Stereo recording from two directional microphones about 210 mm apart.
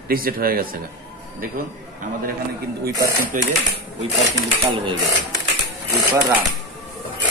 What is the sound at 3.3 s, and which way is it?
Speech, 40° right (ahead or behind).